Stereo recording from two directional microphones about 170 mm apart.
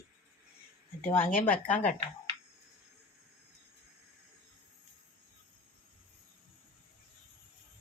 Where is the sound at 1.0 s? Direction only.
10° left (ahead or behind).